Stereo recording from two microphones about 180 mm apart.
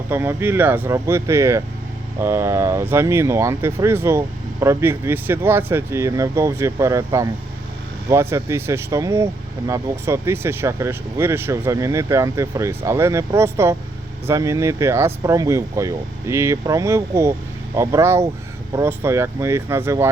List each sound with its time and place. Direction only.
0.1 s speech: 10° right (ahead or behind)